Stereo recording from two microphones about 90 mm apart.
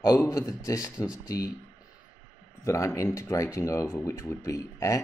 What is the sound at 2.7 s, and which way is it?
Speech, 35° left (ahead or behind).